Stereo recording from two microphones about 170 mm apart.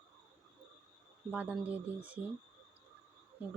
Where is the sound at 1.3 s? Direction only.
10° right (ahead or behind).